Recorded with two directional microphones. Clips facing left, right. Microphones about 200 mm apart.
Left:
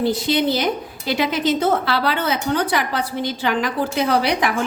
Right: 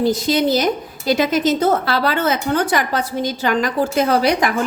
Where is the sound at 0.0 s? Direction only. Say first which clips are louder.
Right 2 dB; 45° right (ahead or behind).